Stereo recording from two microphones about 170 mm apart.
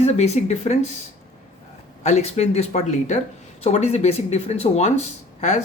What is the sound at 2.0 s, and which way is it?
Speech, 40° left (ahead or behind).